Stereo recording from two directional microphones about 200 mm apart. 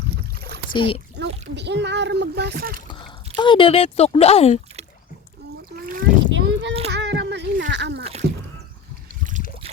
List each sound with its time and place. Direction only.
0.7 s a child's voice: 25° left (ahead or behind)
1.2 s speech: 60° right (ahead or behind)
3.0 s speech: 25° left (ahead or behind)
5.7 s a sound: 45° right (ahead or behind)
6.2 s a sound: 65° right (ahead or behind)
8.2 s rowboat: 55° right (ahead or behind)